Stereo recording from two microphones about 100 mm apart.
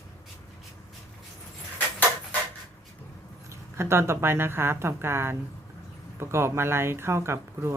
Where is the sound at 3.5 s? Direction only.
25° right (ahead or behind).